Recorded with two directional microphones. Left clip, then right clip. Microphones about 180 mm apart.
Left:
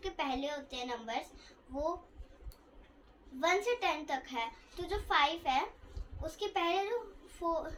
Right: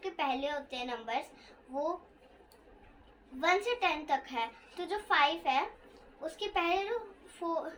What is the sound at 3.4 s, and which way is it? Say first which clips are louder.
A child's voice: right 2 dB; 35° right (ahead or behind).